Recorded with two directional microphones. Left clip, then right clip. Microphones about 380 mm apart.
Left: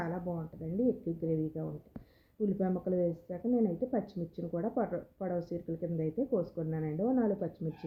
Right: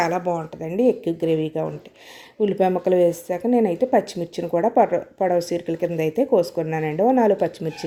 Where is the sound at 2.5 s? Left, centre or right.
Centre.